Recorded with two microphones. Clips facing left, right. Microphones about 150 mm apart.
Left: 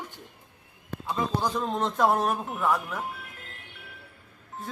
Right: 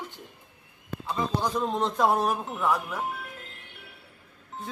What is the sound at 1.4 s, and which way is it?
Speech, centre (ahead or behind).